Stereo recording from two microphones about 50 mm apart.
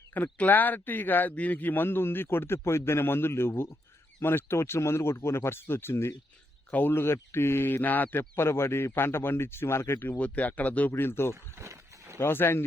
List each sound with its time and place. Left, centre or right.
0.1 s speech: left
6.7 s speech: left
8.2 s speech: left
10.2 s speech: left
10.9 s speech: left
11.6 s a sound: right
12.2 s speech: left